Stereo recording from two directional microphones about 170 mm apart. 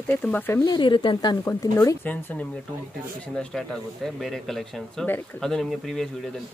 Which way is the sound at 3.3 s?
Centre (ahead or behind).